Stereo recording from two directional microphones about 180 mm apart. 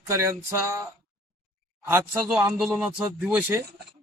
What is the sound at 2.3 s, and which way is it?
Speech, centre (ahead or behind).